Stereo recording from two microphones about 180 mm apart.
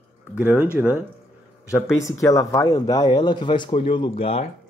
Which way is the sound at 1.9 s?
15° left (ahead or behind).